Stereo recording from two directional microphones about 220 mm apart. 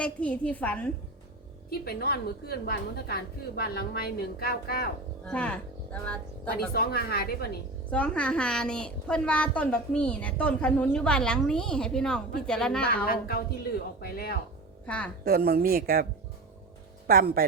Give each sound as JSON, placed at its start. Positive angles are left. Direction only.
{"t": 0.0, "sound": "a woman's voice", "side_deg": 5}
{"t": 1.8, "sound": "a woman's voice", "side_deg": 45}
{"t": 5.2, "sound": "a woman's voice", "side_deg": 5}
{"t": 6.7, "sound": "a woman's voice", "side_deg": 45}
{"t": 7.9, "sound": "a woman's voice", "side_deg": 5}
{"t": 13.1, "sound": "a woman's voice", "side_deg": 45}
{"t": 14.8, "sound": "a woman's voice", "side_deg": 5}
{"t": 15.2, "sound": "speech", "side_deg": -45}
{"t": 17.1, "sound": "speech", "side_deg": -40}